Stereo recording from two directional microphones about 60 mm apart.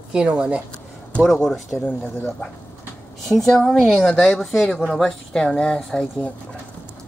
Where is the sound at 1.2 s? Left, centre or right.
Centre.